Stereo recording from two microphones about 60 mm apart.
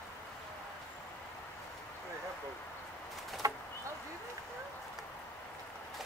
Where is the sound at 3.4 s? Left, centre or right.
Right.